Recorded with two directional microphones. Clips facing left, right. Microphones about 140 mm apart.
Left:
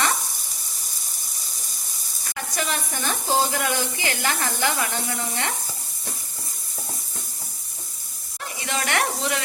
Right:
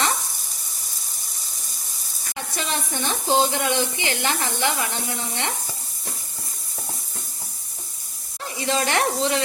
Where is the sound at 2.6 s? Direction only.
25° right (ahead or behind).